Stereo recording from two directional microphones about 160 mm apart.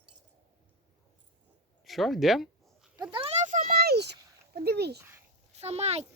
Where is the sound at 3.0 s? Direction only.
35° right (ahead or behind); by 4.9 s 90° right.